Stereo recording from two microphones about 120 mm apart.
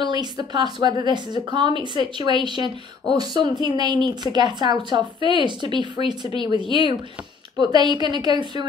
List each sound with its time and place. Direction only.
0.0 s speech: 35° right (ahead or behind)